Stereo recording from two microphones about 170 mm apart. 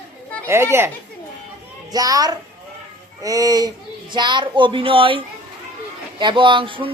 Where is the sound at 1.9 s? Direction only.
20° right (ahead or behind).